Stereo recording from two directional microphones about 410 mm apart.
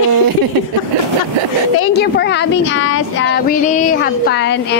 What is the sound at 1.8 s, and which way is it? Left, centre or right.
Speech, left.